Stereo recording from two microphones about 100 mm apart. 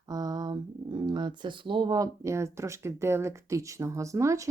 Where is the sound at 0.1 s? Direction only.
40° right (ahead or behind).